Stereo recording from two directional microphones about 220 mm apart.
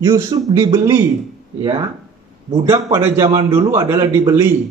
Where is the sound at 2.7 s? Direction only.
15° right (ahead or behind).